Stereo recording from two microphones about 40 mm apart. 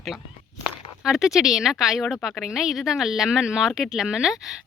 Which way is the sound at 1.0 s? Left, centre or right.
Centre.